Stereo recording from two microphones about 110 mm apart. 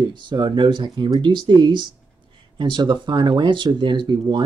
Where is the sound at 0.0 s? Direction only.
45° right (ahead or behind).